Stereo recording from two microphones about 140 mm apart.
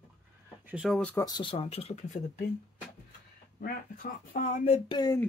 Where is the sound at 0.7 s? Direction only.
5° right (ahead or behind).